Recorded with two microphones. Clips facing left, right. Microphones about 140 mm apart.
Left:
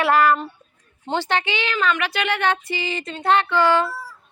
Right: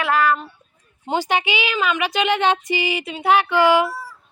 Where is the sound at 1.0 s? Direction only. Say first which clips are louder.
Right 2 dB; 10° right (ahead or behind).